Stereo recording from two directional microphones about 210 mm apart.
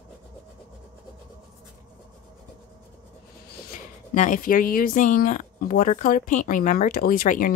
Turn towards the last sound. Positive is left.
turn(degrees=45)  # may be behind; listen again after turning